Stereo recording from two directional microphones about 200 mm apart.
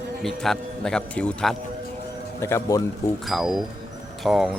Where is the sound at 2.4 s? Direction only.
15° left (ahead or behind).